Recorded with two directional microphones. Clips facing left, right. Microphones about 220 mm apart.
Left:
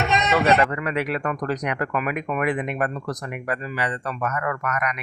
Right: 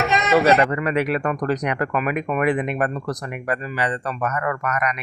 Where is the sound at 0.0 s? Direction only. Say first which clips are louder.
Right 3 dB; centre (ahead or behind).